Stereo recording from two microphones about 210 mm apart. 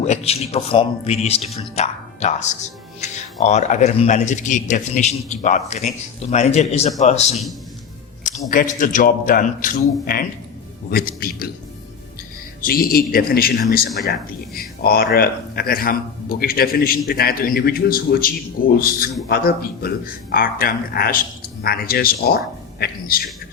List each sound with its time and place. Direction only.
0.0 s speech: 30° left (ahead or behind)
8.4 s speech: 40° left (ahead or behind)
10.9 s speech: 45° left (ahead or behind)
12.6 s speech: 45° left (ahead or behind)